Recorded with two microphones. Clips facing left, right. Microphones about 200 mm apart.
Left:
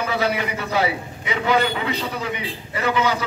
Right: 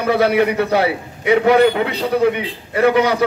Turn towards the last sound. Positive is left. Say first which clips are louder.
# right 8 dB
turn(degrees=-60)  # may be behind; listen again after turning